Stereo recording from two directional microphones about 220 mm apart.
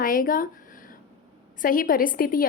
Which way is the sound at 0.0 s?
40° left (ahead or behind).